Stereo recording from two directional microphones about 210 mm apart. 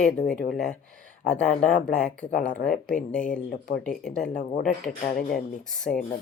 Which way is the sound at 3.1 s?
5° left (ahead or behind).